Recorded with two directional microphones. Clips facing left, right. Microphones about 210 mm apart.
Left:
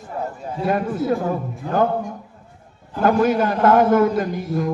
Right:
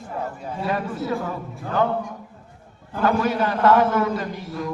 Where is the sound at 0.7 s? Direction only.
50° left (ahead or behind).